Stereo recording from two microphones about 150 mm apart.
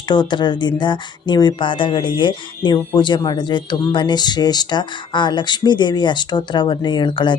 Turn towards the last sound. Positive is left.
turn(degrees=30)  # may be behind; listen again after turning